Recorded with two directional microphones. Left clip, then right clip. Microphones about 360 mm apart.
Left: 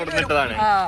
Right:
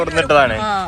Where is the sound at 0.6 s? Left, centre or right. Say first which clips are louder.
Left 2 dB; centre.